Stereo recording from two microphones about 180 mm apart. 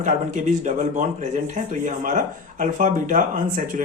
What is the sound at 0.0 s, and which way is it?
Speech, 45° right (ahead or behind).